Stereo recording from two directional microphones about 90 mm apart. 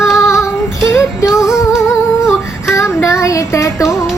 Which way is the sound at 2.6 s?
30° left (ahead or behind).